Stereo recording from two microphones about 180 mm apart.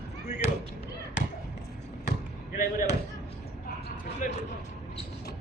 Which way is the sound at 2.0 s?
45° left (ahead or behind).